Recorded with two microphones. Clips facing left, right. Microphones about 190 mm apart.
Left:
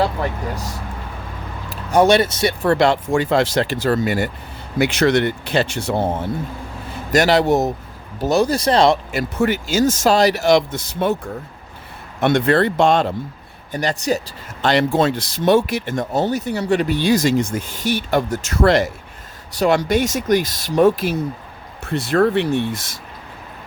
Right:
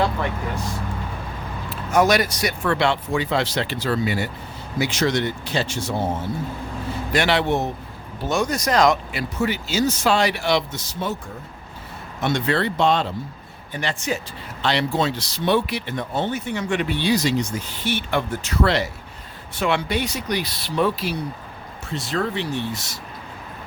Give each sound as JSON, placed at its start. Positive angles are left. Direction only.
{"t": 0.0, "sound": "vehicle", "side_deg": 35}
{"t": 1.7, "sound": "speech", "side_deg": 30}
{"t": 2.7, "sound": "speech", "side_deg": 45}
{"t": 4.8, "sound": "speech", "side_deg": 60}
{"t": 7.1, "sound": "speech", "side_deg": 40}
{"t": 9.1, "sound": "speech", "side_deg": 50}
{"t": 12.2, "sound": "speech", "side_deg": 55}
{"t": 13.7, "sound": "speech", "side_deg": 40}
{"t": 21.8, "sound": "speech", "side_deg": 55}